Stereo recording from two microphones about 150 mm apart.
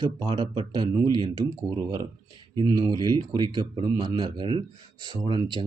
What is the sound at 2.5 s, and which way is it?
Speech, 25° right (ahead or behind).